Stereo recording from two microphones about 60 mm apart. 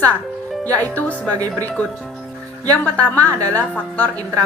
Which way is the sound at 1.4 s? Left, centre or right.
Right.